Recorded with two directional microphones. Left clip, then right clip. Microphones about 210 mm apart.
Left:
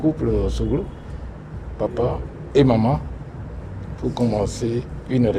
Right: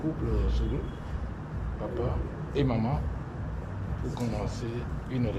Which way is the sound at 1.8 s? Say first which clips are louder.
Left 12 dB; 50° left (ahead or behind).